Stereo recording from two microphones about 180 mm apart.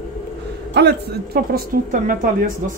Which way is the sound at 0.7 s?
65° right (ahead or behind).